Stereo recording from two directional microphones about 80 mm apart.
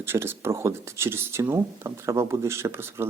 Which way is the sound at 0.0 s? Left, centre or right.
Right.